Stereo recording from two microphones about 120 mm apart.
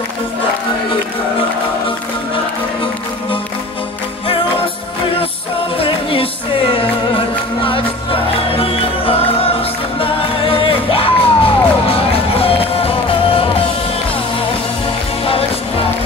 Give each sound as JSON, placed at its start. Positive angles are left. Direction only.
{"t": 5.8, "sound": "music", "side_deg": 50}